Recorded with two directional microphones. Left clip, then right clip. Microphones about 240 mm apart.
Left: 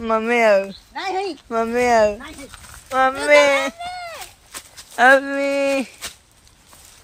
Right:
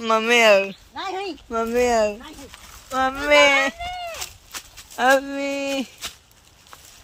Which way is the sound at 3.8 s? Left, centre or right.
Left.